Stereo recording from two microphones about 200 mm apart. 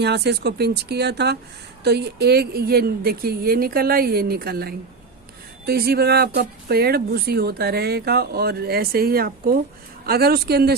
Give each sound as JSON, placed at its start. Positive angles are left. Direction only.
{"t": 0.0, "sound": "speech", "side_deg": -55}